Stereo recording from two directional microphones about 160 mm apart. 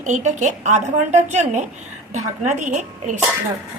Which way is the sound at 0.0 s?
50° right (ahead or behind).